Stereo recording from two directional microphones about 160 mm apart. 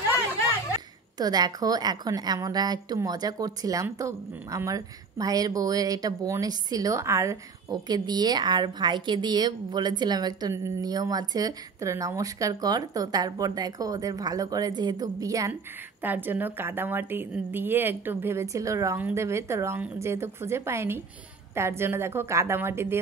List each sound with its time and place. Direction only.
1.1 s a woman's voice: 25° right (ahead or behind)